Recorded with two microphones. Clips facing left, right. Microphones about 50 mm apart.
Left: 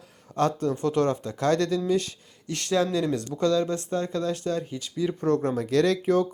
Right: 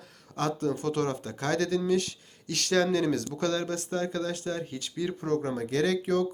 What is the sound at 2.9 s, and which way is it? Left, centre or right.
Speech, right.